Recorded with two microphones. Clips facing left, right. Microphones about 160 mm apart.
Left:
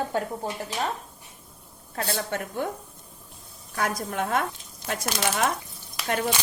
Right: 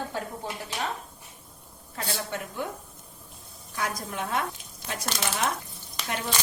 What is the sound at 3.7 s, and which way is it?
Speech, 50° left (ahead or behind).